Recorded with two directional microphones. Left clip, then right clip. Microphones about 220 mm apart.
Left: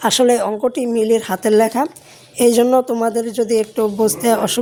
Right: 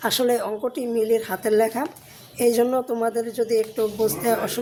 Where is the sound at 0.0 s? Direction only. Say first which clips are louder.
Left 7 dB; 35° left (ahead or behind).